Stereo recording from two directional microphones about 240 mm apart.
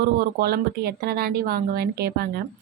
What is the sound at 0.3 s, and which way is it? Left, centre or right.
A woman's voice, right.